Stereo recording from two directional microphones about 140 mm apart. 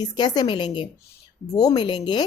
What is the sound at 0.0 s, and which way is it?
Speech, 30° left (ahead or behind).